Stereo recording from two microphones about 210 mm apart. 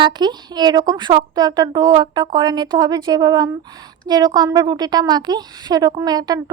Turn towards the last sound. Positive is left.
turn(degrees=-20)  # may be behind; listen again after turning